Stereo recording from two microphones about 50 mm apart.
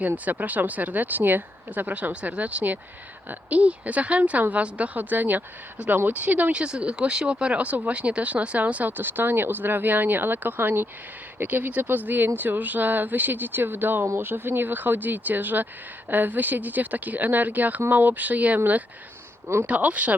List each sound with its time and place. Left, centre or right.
0.3 s speech: right
1.9 s a woman's voice: right
6.5 s a woman's voice: right